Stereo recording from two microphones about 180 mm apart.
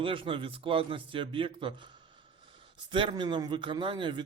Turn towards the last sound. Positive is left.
turn(degrees=-25)  # may be behind; listen again after turning